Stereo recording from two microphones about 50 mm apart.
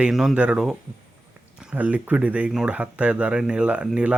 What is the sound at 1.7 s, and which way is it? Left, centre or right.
Speech, right.